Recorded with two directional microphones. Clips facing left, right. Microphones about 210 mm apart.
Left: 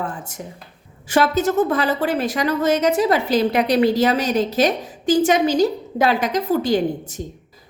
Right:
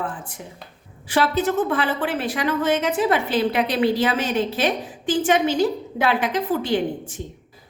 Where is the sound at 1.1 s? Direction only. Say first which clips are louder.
Left 3 dB; 45° left (ahead or behind).